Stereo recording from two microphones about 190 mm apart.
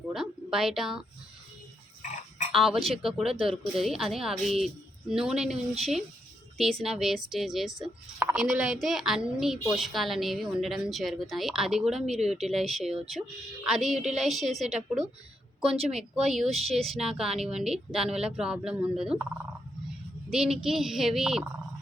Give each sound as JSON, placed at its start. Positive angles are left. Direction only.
{"t": 0.1, "sound": "a sound", "side_deg": 0}
{"t": 2.0, "sound": "frog", "side_deg": 40}
{"t": 2.5, "sound": "a woman's voice", "side_deg": 0}
{"t": 20.3, "sound": "a woman's voice", "side_deg": -5}